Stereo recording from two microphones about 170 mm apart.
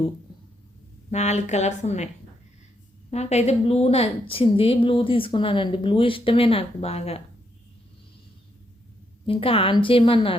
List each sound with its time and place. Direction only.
1.1 s a woman's voice: 40° left (ahead or behind)
3.1 s a woman's voice: 40° left (ahead or behind)
9.2 s a woman's voice: 35° left (ahead or behind)